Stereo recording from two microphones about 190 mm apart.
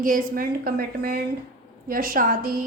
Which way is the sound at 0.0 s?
45° right (ahead or behind).